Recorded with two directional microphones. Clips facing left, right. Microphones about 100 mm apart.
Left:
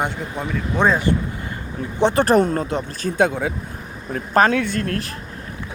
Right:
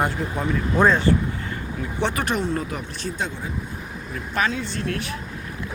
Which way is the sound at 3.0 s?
55° left (ahead or behind).